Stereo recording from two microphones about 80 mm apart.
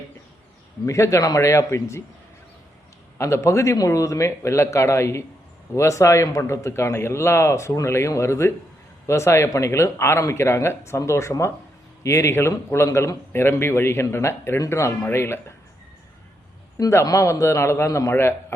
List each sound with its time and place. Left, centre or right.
0.9 s speech: left
3.2 s speech: left
16.9 s speech: left